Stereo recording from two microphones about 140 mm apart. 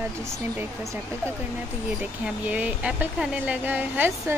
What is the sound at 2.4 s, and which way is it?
A woman's voice, 10° right (ahead or behind).